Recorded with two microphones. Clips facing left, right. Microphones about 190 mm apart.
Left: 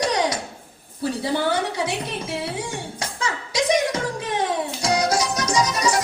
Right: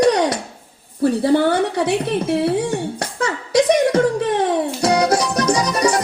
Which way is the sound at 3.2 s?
65° right (ahead or behind).